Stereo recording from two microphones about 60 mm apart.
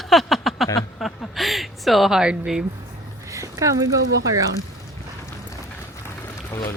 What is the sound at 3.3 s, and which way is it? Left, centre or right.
Speech, right.